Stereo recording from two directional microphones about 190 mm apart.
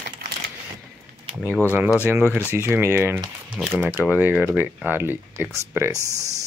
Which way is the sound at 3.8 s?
10° right (ahead or behind).